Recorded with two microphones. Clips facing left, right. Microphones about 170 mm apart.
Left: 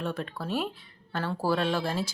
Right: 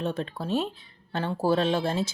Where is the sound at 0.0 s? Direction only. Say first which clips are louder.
Right 3 dB; 25° right (ahead or behind).